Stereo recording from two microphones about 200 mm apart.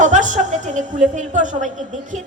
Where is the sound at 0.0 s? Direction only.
40° right (ahead or behind).